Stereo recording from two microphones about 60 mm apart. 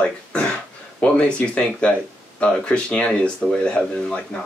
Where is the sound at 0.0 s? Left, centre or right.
Centre.